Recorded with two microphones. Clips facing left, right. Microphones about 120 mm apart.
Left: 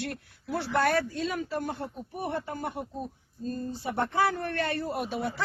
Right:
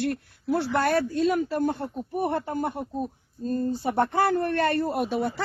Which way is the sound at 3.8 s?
45° right (ahead or behind).